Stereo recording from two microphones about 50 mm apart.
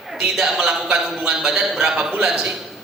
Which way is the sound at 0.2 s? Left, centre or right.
Centre.